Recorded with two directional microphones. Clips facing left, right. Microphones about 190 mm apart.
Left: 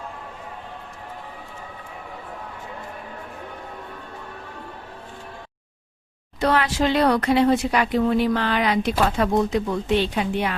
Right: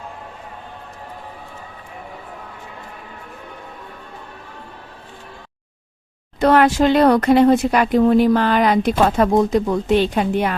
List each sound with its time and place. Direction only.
6.4 s speech: 50° right (ahead or behind)